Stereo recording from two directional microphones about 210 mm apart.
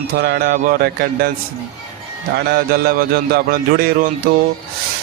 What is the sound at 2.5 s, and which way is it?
Speech, 45° right (ahead or behind).